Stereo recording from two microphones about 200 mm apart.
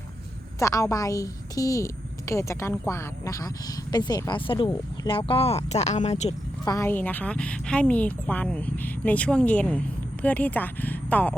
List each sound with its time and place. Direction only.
0.6 s speech: 15° left (ahead or behind); by 6.3 s 35° left (ahead or behind)
6.7 s speech: 15° left (ahead or behind)